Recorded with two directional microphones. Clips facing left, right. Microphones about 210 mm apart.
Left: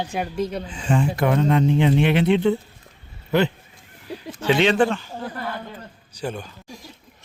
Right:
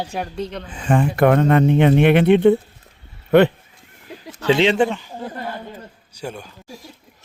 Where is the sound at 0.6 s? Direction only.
60° right (ahead or behind).